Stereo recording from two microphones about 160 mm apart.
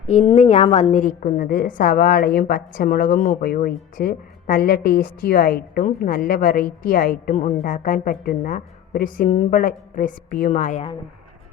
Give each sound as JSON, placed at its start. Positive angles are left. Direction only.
{"t": 0.1, "sound": "a woman's voice", "side_deg": 50}
{"t": 9.5, "sound": "a woman's voice", "side_deg": 60}